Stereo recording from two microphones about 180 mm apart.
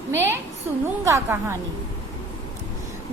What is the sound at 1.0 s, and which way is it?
Speech, 15° right (ahead or behind).